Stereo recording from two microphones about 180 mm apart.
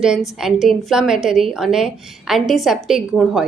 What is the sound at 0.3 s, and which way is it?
A woman's voice, centre (ahead or behind).